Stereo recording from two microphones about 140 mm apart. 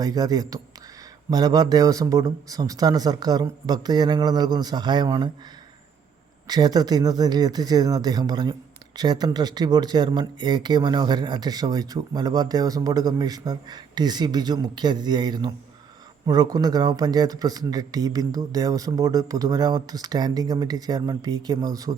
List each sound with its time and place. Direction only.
0.0 s a man's voice: 25° right (ahead or behind)
6.5 s a man's voice: 30° right (ahead or behind)